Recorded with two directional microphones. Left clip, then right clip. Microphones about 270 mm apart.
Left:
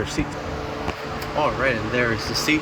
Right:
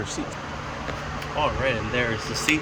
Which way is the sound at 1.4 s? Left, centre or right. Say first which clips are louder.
Left 3 dB; centre.